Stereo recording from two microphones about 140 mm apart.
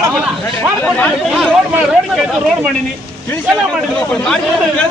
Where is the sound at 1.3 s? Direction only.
5° right (ahead or behind).